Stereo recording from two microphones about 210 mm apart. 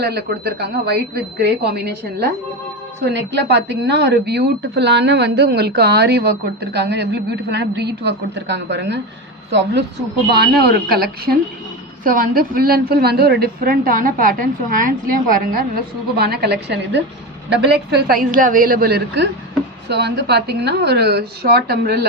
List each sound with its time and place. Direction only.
0.0 s a woman's voice: 50° right (ahead or behind)